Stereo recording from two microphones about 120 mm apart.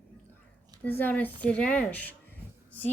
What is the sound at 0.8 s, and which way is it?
Speech, 15° left (ahead or behind).